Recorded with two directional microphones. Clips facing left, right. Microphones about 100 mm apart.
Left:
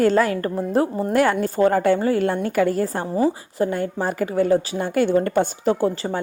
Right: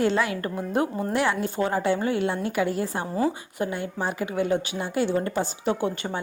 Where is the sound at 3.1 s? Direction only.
25° left (ahead or behind).